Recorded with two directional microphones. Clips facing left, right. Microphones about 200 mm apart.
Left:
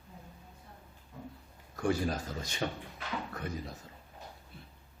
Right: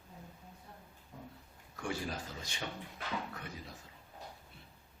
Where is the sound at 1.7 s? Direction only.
40° left (ahead or behind).